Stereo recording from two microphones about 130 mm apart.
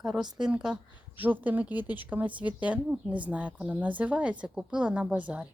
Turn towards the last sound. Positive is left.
turn(degrees=-10)  # may be behind; listen again after turning